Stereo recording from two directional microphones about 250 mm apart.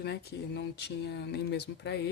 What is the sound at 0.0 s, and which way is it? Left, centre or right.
Speech, left.